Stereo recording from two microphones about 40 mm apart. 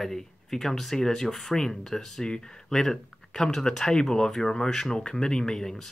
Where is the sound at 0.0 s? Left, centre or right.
Centre.